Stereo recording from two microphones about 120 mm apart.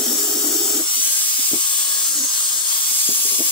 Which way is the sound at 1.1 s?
45° left (ahead or behind).